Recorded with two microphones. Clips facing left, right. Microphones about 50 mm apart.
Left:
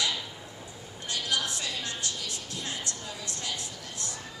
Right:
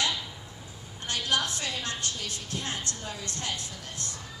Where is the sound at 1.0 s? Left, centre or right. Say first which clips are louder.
Right 2 dB; right.